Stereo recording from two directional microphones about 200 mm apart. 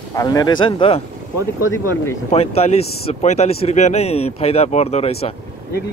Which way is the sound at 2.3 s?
30° left (ahead or behind).